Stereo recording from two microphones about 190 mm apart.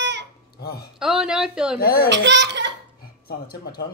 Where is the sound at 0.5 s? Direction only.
55° left (ahead or behind).